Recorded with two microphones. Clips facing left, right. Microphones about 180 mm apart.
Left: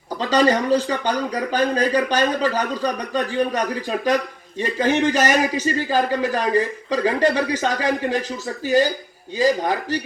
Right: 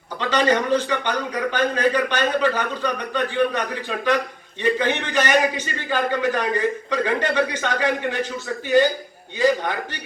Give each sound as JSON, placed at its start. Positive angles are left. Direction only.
{"t": 0.2, "sound": "a man's voice", "side_deg": 35}